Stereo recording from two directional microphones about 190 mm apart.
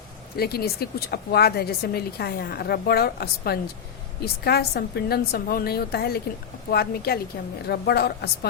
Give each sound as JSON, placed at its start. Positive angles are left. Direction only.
{"t": 0.3, "sound": "speech", "side_deg": 55}